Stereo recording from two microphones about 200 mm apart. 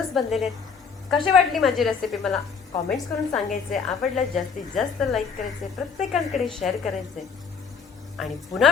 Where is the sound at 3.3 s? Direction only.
40° left (ahead or behind).